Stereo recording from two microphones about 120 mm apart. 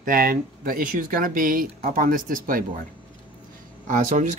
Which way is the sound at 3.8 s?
90° right.